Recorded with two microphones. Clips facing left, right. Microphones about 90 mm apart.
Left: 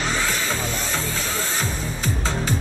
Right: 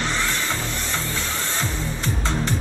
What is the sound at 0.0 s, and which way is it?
Music, 20° left (ahead or behind).